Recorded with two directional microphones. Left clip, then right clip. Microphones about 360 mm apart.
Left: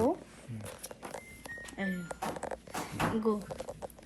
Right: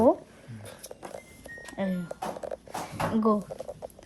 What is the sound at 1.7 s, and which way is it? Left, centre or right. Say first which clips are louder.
Speech: right 6 dB; right.